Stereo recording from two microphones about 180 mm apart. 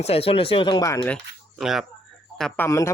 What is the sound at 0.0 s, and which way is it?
A man's voice, 35° left (ahead or behind).